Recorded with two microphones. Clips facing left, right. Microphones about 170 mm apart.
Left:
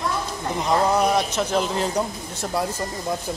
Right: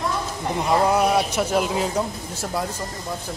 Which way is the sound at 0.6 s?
5° right (ahead or behind).